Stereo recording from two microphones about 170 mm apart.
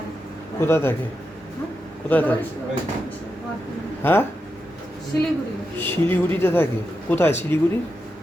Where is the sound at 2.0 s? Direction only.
10° left (ahead or behind).